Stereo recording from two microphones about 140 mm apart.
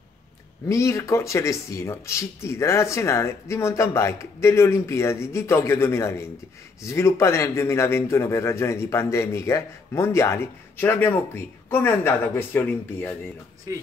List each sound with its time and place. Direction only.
0.7 s a man's voice: 20° left (ahead or behind)